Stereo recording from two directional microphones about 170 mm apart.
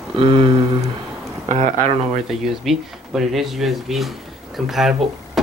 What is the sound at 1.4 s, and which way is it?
Speech, 40° right (ahead or behind).